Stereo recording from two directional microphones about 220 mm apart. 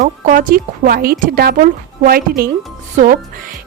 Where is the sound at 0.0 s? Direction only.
40° right (ahead or behind).